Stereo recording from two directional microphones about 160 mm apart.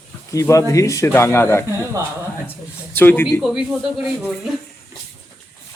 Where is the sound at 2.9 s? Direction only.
10° left (ahead or behind).